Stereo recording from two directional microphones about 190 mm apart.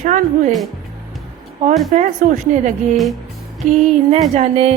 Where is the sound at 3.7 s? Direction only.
35° right (ahead or behind).